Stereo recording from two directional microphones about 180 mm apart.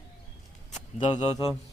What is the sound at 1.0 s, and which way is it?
Speech, 30° left (ahead or behind).